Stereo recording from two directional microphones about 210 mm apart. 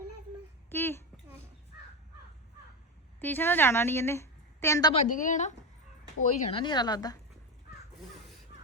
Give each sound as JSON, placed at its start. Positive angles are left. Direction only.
{"t": 0.7, "sound": "a sound", "side_deg": 10}
{"t": 3.2, "sound": "a woman's voice", "side_deg": 10}
{"t": 4.9, "sound": "a woman's voice", "side_deg": 40}
{"t": 6.4, "sound": "a woman's voice", "side_deg": 25}